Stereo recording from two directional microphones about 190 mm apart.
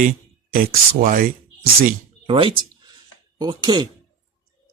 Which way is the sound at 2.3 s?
30° right (ahead or behind).